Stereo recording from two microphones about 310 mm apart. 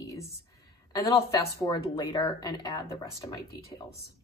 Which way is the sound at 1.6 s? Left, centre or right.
Centre.